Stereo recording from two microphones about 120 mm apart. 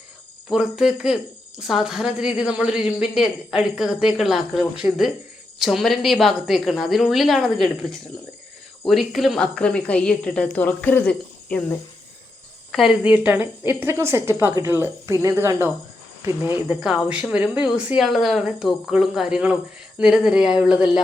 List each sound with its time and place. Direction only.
0.5 s a woman's voice: 5° right (ahead or behind)
12.7 s speech: centre (ahead or behind)
13.0 s a woman's voice: 10° right (ahead or behind)